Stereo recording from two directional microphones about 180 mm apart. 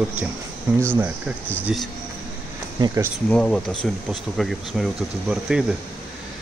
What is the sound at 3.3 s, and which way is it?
Speech, 5° left (ahead or behind).